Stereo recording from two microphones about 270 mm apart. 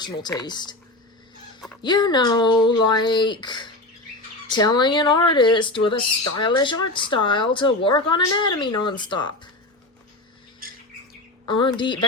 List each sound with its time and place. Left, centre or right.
0.0 s speech: centre
1.8 s speech: centre
11.4 s speech: centre